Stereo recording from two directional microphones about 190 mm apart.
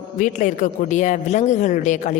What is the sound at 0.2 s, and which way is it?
A man's voice, 40° left (ahead or behind).